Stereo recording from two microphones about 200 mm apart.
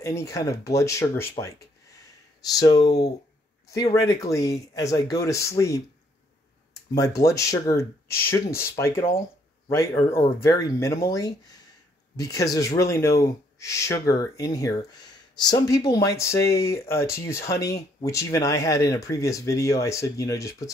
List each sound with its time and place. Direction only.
0.0 s speech: 15° left (ahead or behind)
2.0 s a sound: 20° left (ahead or behind)
3.7 s speech: 15° left (ahead or behind)
7.2 s speech: 15° left (ahead or behind)